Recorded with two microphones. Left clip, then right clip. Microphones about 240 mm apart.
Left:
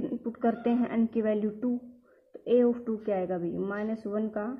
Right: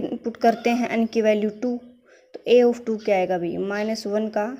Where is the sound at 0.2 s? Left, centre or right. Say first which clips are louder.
Right 11 dB; right.